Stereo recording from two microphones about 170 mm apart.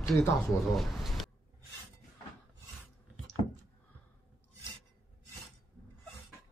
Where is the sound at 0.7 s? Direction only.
Centre (ahead or behind).